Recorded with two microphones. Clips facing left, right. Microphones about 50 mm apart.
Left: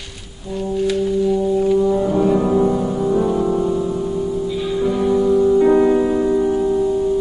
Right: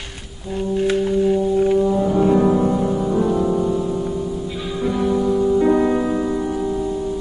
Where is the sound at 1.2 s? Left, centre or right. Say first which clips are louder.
Even; right.